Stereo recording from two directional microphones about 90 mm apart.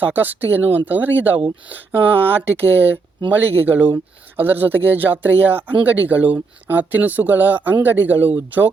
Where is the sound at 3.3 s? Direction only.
20° right (ahead or behind).